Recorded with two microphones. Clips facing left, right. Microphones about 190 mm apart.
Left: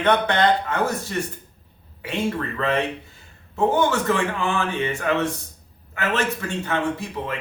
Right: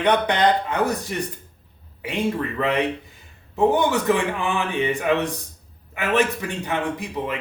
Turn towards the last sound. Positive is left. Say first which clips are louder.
# right 1 dB
turn(degrees=-15)  # may be behind; listen again after turning